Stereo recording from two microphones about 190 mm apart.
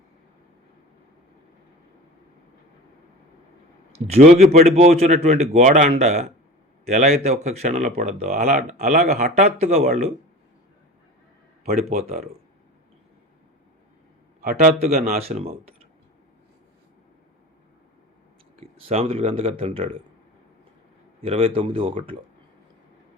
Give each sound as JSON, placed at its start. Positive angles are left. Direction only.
{"t": 3.9, "sound": "speech", "side_deg": -35}
{"t": 11.6, "sound": "speech", "side_deg": -50}
{"t": 14.5, "sound": "speech", "side_deg": -35}
{"t": 14.9, "sound": "speech", "side_deg": -50}
{"t": 18.6, "sound": "speech", "side_deg": -30}
{"t": 21.2, "sound": "speech", "side_deg": -30}